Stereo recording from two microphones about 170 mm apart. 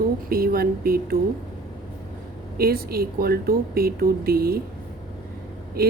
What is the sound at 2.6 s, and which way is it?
Speech, 65° right (ahead or behind).